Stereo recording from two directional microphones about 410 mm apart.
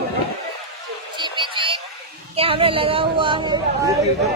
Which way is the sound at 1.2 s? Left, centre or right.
Centre.